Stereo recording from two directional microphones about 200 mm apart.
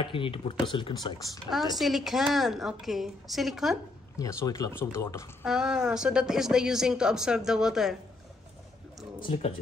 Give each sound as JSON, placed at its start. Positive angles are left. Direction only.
{"t": 0.0, "sound": "speech", "side_deg": 25}
{"t": 1.8, "sound": "speech", "side_deg": 0}
{"t": 4.2, "sound": "speech", "side_deg": 15}
{"t": 5.4, "sound": "speech", "side_deg": -5}
{"t": 9.2, "sound": "speech", "side_deg": 30}